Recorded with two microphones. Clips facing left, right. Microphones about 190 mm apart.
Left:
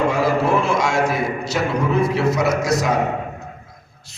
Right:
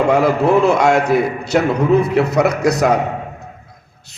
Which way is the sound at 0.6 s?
60° right (ahead or behind).